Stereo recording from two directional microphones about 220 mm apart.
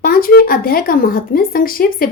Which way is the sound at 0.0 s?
40° left (ahead or behind).